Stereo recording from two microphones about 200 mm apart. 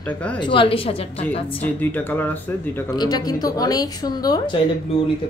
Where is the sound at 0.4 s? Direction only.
25° left (ahead or behind).